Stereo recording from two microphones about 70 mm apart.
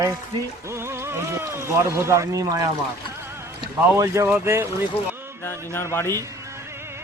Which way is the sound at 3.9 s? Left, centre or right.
Right.